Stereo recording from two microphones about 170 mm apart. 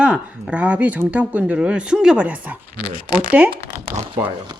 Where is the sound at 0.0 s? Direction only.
5° right (ahead or behind).